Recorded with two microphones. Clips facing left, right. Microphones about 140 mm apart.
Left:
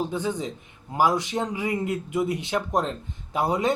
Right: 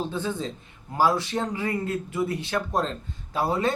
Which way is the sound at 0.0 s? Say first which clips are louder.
Left 2 dB; 15° left (ahead or behind).